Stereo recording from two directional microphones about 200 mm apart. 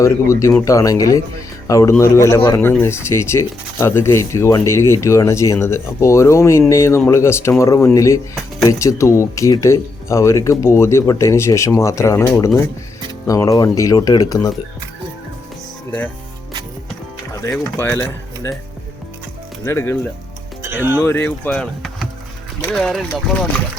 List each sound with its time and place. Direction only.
0.0 s a man's voice: 15° left (ahead or behind)
17.3 s a man's voice: 15° left (ahead or behind)
19.6 s a man's voice: 15° left (ahead or behind)
20.6 s speech: 10° right (ahead or behind)
21.0 s a man's voice: 10° left (ahead or behind)